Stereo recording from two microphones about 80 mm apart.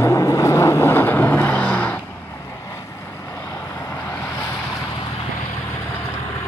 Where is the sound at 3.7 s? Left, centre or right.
Left.